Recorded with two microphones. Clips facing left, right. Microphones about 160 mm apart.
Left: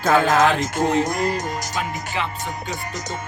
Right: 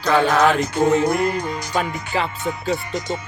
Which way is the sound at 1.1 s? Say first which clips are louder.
Right 2 dB; 40° left (ahead or behind).